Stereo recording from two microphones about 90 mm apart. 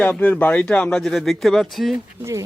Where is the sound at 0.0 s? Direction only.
15° left (ahead or behind); by 2.0 s centre (ahead or behind).